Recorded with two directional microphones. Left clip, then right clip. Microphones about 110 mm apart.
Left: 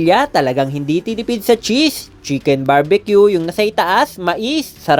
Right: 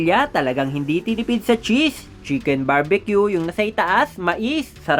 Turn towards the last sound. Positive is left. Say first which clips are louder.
# left 5 dB
turn(degrees=25)  # may be behind; listen again after turning